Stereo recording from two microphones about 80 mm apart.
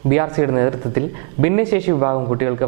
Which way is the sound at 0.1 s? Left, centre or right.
Centre.